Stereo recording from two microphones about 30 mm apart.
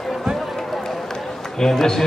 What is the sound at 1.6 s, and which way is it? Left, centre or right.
Speech, centre.